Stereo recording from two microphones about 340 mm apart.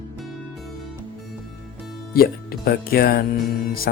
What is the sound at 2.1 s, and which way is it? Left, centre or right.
Speech, left.